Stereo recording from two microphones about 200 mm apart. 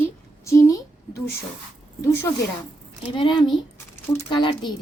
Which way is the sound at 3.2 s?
20° left (ahead or behind).